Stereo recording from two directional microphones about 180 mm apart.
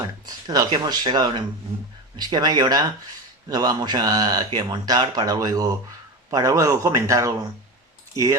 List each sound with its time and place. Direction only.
0.3 s speech: 20° right (ahead or behind)